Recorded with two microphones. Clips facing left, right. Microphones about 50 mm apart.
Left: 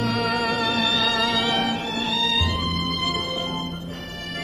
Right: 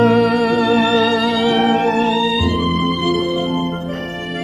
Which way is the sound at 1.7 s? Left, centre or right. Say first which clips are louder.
Right 12 dB; right.